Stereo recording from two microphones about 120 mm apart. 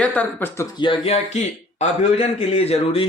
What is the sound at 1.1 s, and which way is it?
A man's voice, 65° left (ahead or behind).